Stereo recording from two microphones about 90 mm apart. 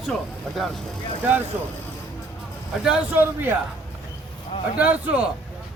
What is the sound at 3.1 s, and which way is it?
Speech, 25° right (ahead or behind).